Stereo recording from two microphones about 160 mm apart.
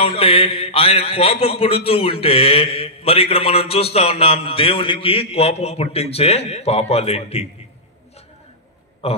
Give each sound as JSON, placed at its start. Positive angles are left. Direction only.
{"t": 0.0, "sound": "mantra", "side_deg": 35}
{"t": 9.0, "sound": "a man's voice", "side_deg": 35}